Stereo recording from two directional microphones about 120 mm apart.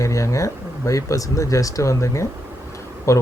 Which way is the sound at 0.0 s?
25° left (ahead or behind).